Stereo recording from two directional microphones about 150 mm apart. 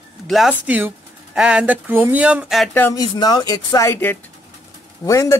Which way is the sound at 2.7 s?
15° left (ahead or behind).